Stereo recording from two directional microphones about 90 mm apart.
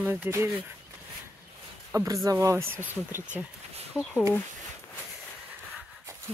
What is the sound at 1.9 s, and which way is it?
Speech, 35° right (ahead or behind).